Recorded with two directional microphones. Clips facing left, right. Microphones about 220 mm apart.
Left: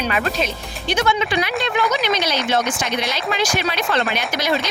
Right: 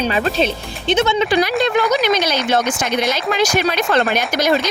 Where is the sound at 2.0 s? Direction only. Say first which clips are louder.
Right 4 dB; 50° right (ahead or behind).